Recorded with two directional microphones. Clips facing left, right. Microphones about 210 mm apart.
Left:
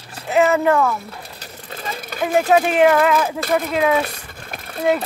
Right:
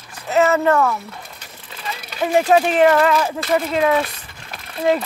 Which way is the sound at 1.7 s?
40° left (ahead or behind).